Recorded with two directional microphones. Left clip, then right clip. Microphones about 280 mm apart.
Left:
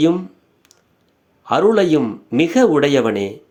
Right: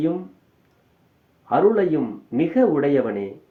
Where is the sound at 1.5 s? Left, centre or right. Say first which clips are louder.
Left 4 dB; left.